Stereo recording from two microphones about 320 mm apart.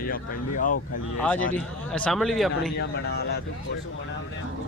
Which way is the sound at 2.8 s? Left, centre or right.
Left.